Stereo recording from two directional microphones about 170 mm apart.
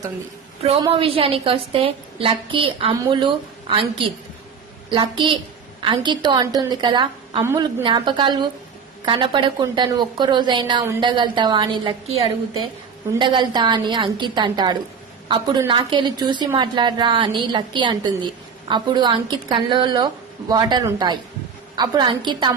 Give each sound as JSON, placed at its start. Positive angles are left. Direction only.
{"t": 0.6, "sound": "a woman's voice", "side_deg": -30}
{"t": 4.9, "sound": "a woman's voice", "side_deg": -30}